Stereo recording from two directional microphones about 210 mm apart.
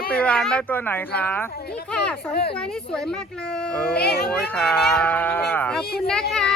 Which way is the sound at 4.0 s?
50° left (ahead or behind).